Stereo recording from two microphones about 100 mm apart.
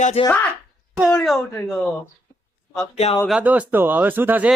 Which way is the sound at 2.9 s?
90° left.